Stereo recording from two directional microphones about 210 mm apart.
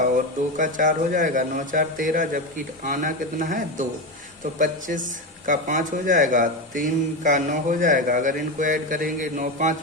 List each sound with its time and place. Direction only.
0.5 s speech: 40° right (ahead or behind)